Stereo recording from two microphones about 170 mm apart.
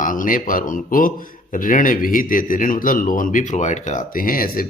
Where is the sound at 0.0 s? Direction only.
50° left (ahead or behind).